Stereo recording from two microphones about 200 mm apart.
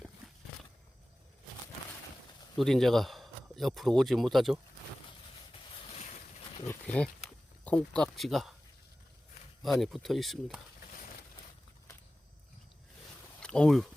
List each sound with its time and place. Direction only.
0.2 s horse: centre (ahead or behind)
2.6 s a man's voice: centre (ahead or behind)
5.5 s boat: 30° left (ahead or behind)
6.7 s speech: 5° left (ahead or behind)
9.8 s speech: centre (ahead or behind)
13.4 s speech: 5° left (ahead or behind)